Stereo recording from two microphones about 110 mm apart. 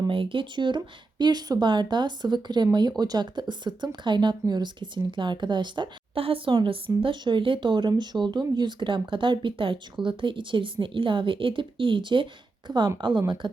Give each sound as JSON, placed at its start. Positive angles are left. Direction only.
{"t": 0.1, "sound": "speech", "side_deg": -50}